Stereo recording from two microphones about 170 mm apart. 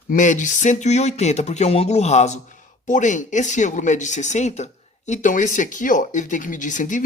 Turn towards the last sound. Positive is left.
turn(degrees=50)  # may be behind; listen again after turning